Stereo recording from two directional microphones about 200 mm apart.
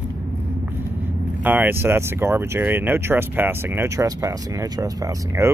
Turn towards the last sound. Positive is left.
turn(degrees=-15)  # may be behind; listen again after turning